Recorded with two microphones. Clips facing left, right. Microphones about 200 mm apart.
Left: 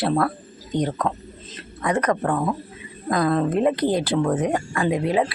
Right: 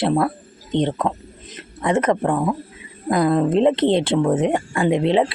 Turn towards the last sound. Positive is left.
turn(degrees=-25)  # may be behind; listen again after turning